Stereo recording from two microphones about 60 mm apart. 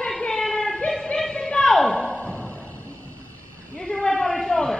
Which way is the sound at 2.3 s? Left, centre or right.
Right.